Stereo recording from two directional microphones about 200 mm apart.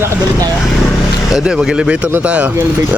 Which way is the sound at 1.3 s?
5° right (ahead or behind).